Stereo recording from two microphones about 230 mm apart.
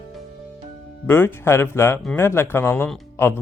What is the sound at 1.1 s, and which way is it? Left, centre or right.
Speech, centre.